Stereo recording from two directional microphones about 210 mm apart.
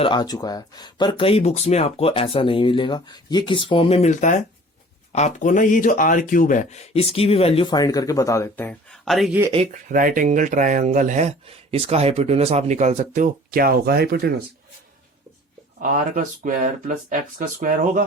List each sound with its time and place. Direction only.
0.0 s speech: 20° left (ahead or behind); by 9.4 s centre (ahead or behind)
9.9 s speech: 40° right (ahead or behind)
15.8 s speech: 40° right (ahead or behind)